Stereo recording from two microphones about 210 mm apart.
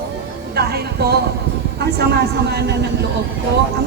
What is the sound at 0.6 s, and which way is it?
A woman's voice, 50° right (ahead or behind).